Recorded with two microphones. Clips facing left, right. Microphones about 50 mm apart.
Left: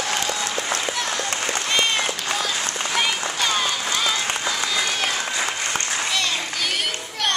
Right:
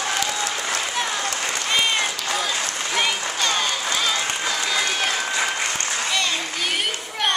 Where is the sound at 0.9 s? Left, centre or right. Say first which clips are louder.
Right 1 dB; centre.